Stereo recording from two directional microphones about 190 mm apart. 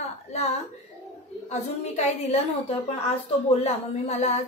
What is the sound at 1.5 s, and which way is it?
Speech, 35° left (ahead or behind).